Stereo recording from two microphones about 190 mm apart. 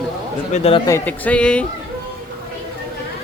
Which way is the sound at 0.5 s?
30° left (ahead or behind).